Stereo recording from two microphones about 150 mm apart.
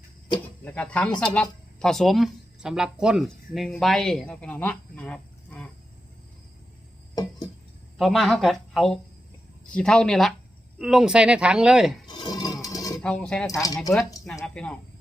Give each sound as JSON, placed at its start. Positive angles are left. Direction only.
{"t": 0.3, "sound": "speech", "side_deg": 10}
{"t": 7.9, "sound": "speech", "side_deg": 0}
{"t": 12.0, "sound": "a sound", "side_deg": 30}
{"t": 13.0, "sound": "speech", "side_deg": 5}
{"t": 13.5, "sound": "speech", "side_deg": 25}
{"t": 14.4, "sound": "speech", "side_deg": 5}